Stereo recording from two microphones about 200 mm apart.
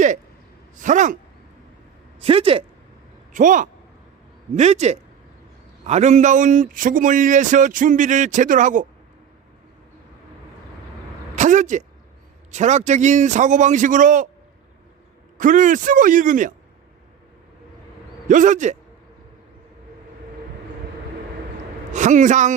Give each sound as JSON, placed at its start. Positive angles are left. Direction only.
{"t": 0.8, "sound": "speech", "side_deg": -40}
{"t": 2.2, "sound": "speech", "side_deg": -30}
{"t": 3.3, "sound": "a man's voice", "side_deg": -40}
{"t": 11.3, "sound": "a man's voice", "side_deg": -40}
{"t": 15.4, "sound": "a man's voice", "side_deg": -40}
{"t": 18.3, "sound": "a man's voice", "side_deg": -40}
{"t": 21.9, "sound": "a man's voice", "side_deg": -40}